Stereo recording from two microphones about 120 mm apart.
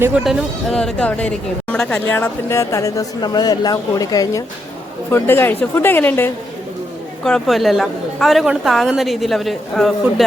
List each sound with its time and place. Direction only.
0.3 s speech: 5° left (ahead or behind); by 4.4 s 30° left (ahead or behind)
5.1 s speech: 20° left (ahead or behind)
7.3 s a woman's voice: centre (ahead or behind)